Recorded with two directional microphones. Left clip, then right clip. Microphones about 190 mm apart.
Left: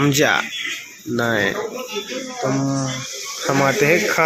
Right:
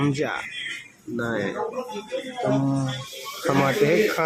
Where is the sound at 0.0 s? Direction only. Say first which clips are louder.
Left 9 dB; 15° left (ahead or behind).